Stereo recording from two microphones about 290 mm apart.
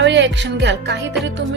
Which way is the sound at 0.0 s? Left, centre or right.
Right.